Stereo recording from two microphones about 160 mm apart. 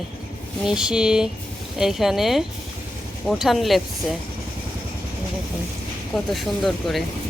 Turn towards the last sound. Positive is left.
turn(degrees=0)  # may be behind; listen again after turning